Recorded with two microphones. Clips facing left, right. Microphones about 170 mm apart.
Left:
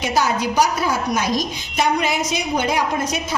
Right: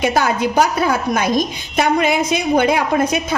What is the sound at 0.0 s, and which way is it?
A woman's voice, 55° right (ahead or behind).